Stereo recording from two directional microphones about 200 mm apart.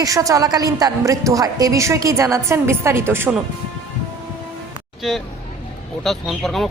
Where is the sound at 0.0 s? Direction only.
15° right (ahead or behind).